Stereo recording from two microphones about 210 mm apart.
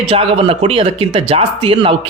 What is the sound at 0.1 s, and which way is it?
Speech, 25° right (ahead or behind).